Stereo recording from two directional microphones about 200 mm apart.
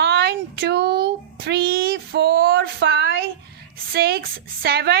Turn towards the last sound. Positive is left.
turn(degrees=-55)  # may be behind; listen again after turning